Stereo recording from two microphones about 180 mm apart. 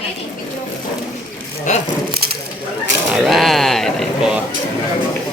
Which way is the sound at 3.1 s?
Centre (ahead or behind).